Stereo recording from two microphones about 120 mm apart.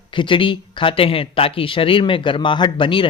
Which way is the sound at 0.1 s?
45° left (ahead or behind).